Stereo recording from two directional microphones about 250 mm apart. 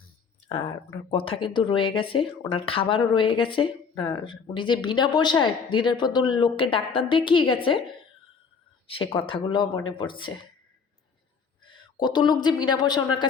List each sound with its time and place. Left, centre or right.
0.4 s speech: centre
8.9 s speech: left
11.6 s a man's voice: centre